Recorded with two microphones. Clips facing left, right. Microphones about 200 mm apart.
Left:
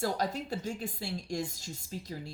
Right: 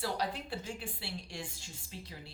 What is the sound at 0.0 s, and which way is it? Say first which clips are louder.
A woman's voice: left 4 dB; 45° left (ahead or behind).